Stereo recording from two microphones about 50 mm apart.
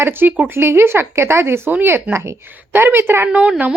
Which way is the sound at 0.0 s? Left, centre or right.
Right.